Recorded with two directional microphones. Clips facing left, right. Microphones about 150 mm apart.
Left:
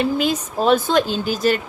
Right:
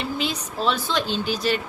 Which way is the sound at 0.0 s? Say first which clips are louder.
Left 8 dB; 45° left (ahead or behind).